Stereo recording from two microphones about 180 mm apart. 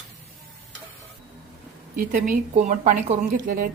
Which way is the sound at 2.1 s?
45° right (ahead or behind).